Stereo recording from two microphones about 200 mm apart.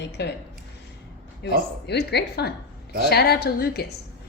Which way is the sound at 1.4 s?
55° left (ahead or behind).